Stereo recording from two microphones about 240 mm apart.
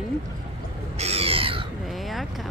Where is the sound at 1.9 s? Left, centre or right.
Centre.